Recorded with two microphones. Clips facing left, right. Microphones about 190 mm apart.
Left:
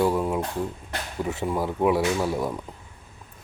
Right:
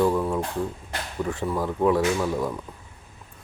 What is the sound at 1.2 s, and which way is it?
Speech, 10° left (ahead or behind).